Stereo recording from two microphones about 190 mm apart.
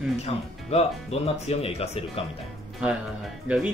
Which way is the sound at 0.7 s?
35° left (ahead or behind).